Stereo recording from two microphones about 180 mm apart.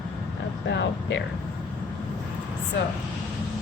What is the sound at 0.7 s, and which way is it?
Speech, 80° left.